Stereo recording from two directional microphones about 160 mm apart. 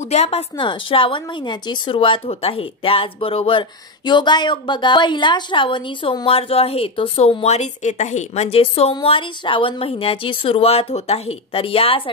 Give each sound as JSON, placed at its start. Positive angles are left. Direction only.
{"t": 0.0, "sound": "a woman's voice", "side_deg": 40}